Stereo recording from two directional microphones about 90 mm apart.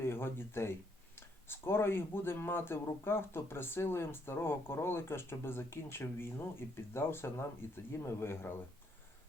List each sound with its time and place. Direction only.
0.0 s speech: 25° left (ahead or behind)